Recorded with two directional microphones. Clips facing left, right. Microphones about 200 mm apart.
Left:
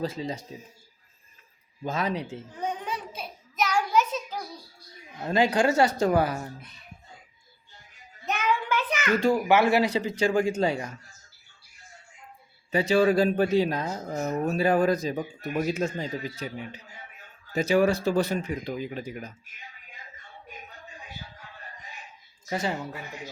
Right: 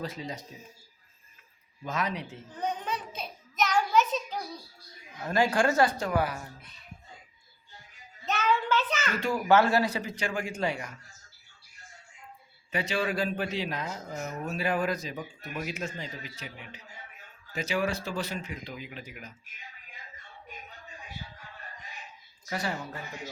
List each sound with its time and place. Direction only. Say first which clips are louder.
0.0 s a man's voice: left 6 dB; 30° left (ahead or behind)
1.8 s a man's voice: left 4 dB; 30° left (ahead or behind)
2.6 s child singing: even; 10° left (ahead or behind)
5.2 s a man's voice: left 3 dB; 20° left (ahead or behind)
5.9 s speech: left 6 dB; 40° left (ahead or behind)
8.3 s child singing: even; 15° left (ahead or behind)
9.5 s a man's voice: right 2 dB; 10° left (ahead or behind); by 10.9 s 25° left (ahead or behind)
12.7 s speech: left 9 dB; 35° left (ahead or behind)
15.2 s speech: left 8 dB; 45° left (ahead or behind)
17.5 s speech: left 8 dB; 40° left (ahead or behind)
18.1 s speech: left 9 dB; 55° left (ahead or behind)
18.4 s speech: left 9 dB; 40° left (ahead or behind)
22.4 s a woman's voice: left 4 dB; 20° left (ahead or behind)